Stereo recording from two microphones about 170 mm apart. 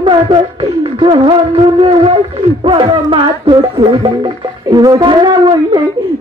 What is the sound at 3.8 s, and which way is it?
Music, 25° right (ahead or behind).